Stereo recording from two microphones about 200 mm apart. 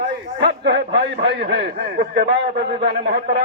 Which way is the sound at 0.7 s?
55° right (ahead or behind).